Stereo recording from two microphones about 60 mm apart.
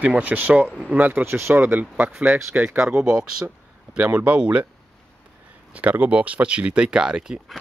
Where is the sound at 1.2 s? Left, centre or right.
Right.